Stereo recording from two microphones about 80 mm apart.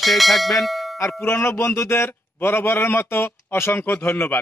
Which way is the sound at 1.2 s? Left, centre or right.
Left.